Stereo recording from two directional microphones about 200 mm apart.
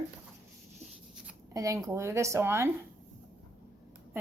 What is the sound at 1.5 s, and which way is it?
A woman's voice, 15° right (ahead or behind).